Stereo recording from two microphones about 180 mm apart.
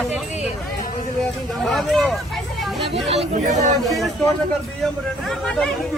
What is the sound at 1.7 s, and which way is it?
Speech, centre (ahead or behind).